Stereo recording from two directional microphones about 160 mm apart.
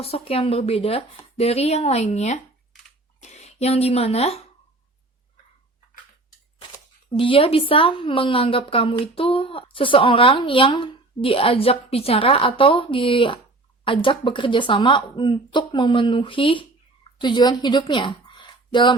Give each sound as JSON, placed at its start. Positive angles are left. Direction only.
{"t": 0.0, "sound": "a woman's voice", "side_deg": 40}
{"t": 7.1, "sound": "a woman's voice", "side_deg": 35}